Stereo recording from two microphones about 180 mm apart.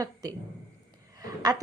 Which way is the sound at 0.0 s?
20° right (ahead or behind).